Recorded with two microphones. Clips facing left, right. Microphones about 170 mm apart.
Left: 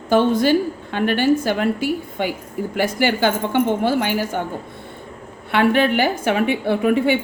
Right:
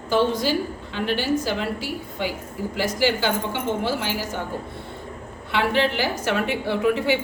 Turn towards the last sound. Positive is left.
turn(degrees=55)  # may be behind; listen again after turning